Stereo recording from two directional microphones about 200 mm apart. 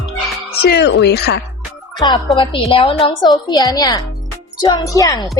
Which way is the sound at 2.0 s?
20° left (ahead or behind).